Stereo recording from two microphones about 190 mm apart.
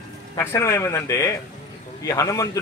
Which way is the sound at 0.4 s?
15° left (ahead or behind).